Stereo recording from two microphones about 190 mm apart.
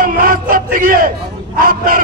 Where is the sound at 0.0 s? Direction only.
50° right (ahead or behind).